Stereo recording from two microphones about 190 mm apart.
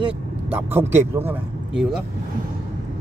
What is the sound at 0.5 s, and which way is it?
Speech, 10° right (ahead or behind).